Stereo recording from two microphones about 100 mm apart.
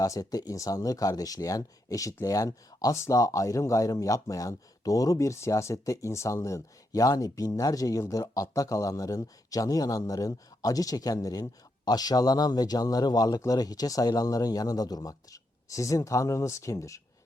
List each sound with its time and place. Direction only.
0.0 s speech: 35° left (ahead or behind)